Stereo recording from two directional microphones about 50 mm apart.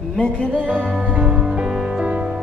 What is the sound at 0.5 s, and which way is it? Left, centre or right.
Music, right.